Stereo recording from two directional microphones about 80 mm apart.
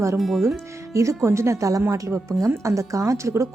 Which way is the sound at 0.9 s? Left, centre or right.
Right.